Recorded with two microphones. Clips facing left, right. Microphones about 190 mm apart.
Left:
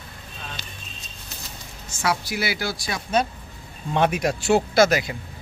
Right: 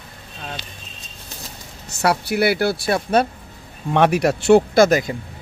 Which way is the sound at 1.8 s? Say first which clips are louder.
Right 5 dB; 65° right (ahead or behind).